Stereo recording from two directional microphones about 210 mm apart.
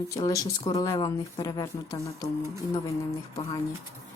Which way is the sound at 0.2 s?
15° left (ahead or behind).